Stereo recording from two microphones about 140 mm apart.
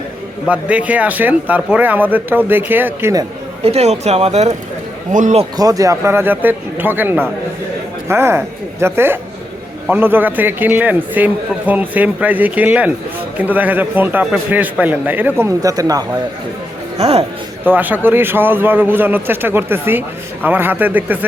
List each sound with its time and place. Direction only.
0.4 s a man's voice: 10° right (ahead or behind)
3.6 s speech: 50° right (ahead or behind)
5.1 s speech: 60° right (ahead or behind)
5.5 s a man's voice: 25° right (ahead or behind)
17.0 s speech: 45° right (ahead or behind)
17.7 s a man's voice: 15° right (ahead or behind)